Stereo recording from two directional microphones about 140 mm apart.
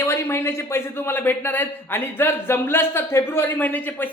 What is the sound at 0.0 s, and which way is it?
A man's voice, 20° left (ahead or behind).